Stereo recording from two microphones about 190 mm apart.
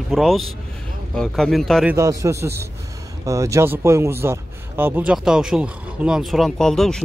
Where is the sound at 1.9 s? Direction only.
15° right (ahead or behind); by 7.0 s centre (ahead or behind).